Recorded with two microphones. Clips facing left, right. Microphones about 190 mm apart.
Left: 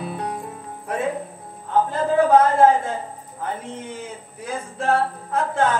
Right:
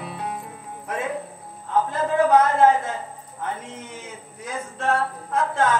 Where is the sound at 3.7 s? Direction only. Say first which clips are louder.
Left 4 dB; 30° left (ahead or behind).